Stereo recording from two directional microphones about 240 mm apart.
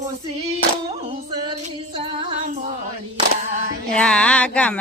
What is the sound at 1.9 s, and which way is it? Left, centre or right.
Female singing, right.